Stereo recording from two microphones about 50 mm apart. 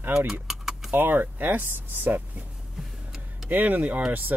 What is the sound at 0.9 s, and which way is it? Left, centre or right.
Speech, right.